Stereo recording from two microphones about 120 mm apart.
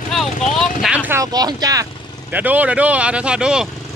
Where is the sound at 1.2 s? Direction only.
35° right (ahead or behind).